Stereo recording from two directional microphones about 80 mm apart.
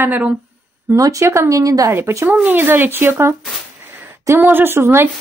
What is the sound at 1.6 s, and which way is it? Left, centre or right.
Speech, right.